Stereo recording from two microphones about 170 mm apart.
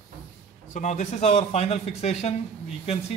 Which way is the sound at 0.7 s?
45° left (ahead or behind).